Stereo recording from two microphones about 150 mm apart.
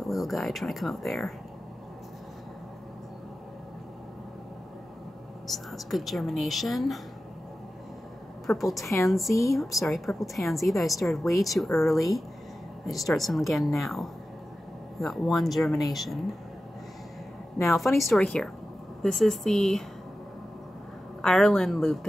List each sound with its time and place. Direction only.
0.0 s speech: centre (ahead or behind)
5.5 s a woman's voice: centre (ahead or behind)
8.5 s a woman's voice: centre (ahead or behind)
9.3 s a woman's voice: 20° left (ahead or behind)
9.6 s a woman's voice: centre (ahead or behind)
17.6 s a woman's voice: centre (ahead or behind)
21.2 s a woman's voice: 5° left (ahead or behind)